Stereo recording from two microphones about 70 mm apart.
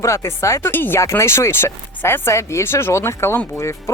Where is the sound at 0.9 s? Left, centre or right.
Left.